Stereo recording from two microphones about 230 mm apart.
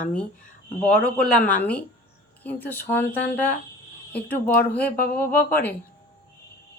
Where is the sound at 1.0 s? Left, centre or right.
Centre.